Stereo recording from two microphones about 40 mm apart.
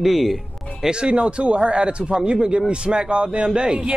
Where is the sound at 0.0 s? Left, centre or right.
Centre.